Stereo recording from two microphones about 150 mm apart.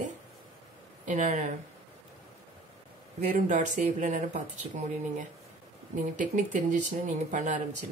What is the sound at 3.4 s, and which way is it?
Speech, 55° right (ahead or behind).